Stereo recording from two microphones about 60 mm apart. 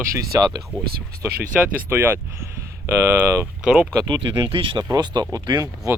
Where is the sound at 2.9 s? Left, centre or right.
Right.